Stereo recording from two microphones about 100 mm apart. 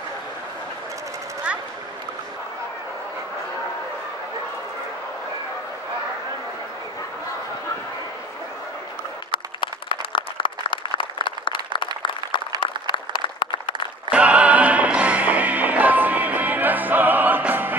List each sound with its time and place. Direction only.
9.3 s applause: 55° left (ahead or behind)
14.1 s music: 15° right (ahead or behind)